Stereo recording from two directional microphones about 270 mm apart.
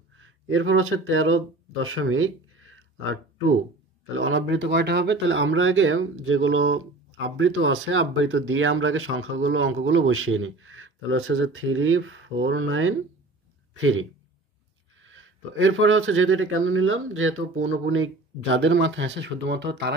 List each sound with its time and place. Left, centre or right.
0.1 s speech: right